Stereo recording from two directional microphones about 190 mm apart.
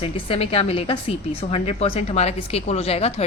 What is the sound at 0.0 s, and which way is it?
Speech, 30° left (ahead or behind).